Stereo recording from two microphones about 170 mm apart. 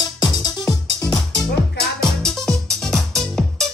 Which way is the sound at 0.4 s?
20° left (ahead or behind).